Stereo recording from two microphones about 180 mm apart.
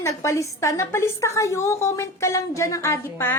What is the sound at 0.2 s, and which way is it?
A woman's voice, 15° left (ahead or behind).